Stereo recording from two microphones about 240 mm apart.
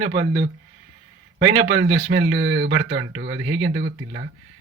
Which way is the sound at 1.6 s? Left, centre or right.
Right.